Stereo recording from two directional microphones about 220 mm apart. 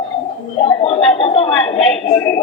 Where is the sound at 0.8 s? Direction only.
25° left (ahead or behind).